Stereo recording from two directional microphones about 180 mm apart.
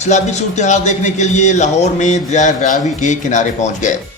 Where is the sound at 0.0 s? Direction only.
40° left (ahead or behind).